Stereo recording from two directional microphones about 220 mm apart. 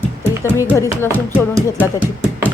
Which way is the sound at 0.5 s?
10° left (ahead or behind).